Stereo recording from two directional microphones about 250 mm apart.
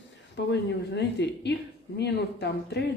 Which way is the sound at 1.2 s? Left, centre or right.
Left.